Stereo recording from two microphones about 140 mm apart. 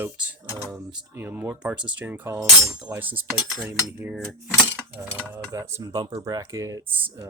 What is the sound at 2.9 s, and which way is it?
Speech, 25° right (ahead or behind).